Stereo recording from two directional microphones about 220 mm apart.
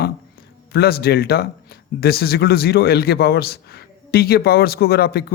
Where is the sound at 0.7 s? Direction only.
45° left (ahead or behind).